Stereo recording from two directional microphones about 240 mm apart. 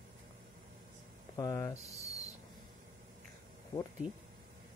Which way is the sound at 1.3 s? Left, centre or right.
Centre.